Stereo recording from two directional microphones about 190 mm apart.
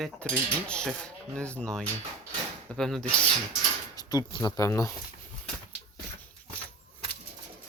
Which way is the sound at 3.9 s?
20° left (ahead or behind).